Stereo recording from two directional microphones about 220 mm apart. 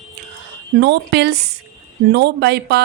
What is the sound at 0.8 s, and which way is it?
Speech, 50° right (ahead or behind).